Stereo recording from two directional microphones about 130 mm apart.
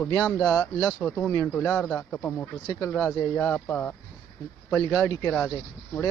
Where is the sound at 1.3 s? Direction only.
15° left (ahead or behind).